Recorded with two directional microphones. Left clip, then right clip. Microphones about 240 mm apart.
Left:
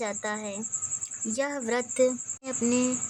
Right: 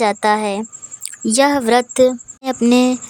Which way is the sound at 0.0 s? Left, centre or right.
Right.